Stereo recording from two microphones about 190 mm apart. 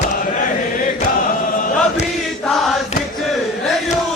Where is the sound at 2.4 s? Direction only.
Centre (ahead or behind).